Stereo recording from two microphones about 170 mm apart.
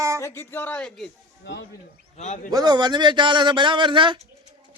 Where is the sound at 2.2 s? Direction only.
50° left (ahead or behind).